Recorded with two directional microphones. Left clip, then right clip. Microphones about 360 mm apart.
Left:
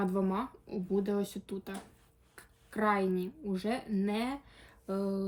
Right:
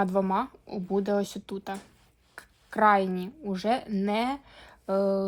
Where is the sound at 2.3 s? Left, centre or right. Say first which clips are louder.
Right 10 dB; centre.